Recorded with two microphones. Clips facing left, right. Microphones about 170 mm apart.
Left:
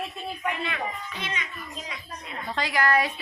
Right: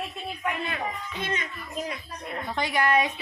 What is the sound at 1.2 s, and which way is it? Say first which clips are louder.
A child's voice: right 3 dB; 50° right (ahead or behind).